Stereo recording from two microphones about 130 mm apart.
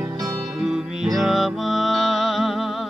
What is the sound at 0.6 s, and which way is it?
Music, centre (ahead or behind).